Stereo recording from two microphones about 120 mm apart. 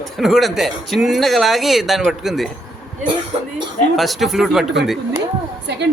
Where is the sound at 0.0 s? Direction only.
Centre (ahead or behind).